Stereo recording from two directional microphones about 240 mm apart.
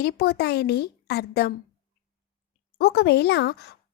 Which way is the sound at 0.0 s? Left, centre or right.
Left.